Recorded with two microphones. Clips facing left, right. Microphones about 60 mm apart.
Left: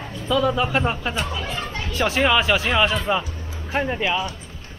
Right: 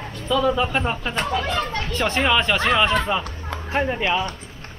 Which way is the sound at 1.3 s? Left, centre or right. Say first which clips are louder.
Right 5 dB; right.